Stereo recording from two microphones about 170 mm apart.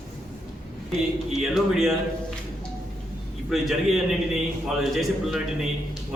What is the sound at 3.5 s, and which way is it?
A man's voice, centre (ahead or behind).